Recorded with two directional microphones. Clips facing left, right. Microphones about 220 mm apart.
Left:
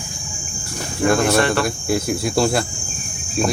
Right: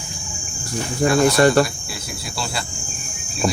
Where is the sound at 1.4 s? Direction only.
40° right (ahead or behind).